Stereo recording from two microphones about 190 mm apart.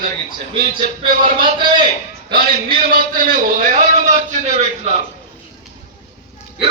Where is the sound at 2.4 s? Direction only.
50° right (ahead or behind).